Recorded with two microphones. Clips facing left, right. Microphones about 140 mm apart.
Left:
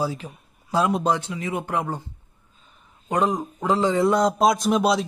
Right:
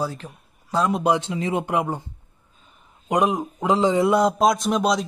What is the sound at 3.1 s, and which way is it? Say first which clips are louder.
Speech: right 2 dB; 15° right (ahead or behind).